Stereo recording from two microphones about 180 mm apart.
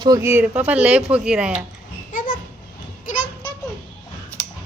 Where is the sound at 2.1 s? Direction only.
50° left (ahead or behind).